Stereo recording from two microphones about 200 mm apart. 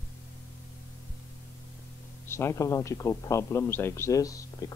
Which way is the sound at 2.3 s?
10° left (ahead or behind).